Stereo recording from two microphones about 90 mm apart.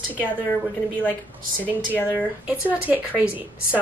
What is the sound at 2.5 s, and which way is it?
A woman's voice, 15° right (ahead or behind).